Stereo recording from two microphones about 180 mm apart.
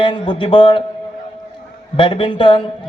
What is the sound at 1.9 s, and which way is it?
Speech, 30° left (ahead or behind).